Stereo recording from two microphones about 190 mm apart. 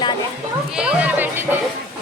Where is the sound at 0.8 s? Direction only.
10° right (ahead or behind).